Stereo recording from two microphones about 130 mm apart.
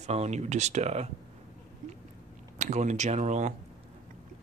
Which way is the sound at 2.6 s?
65° right (ahead or behind).